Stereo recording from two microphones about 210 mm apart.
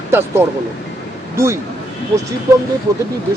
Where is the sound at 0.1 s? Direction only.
10° right (ahead or behind).